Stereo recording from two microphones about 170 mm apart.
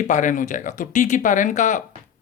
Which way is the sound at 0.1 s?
50° left (ahead or behind).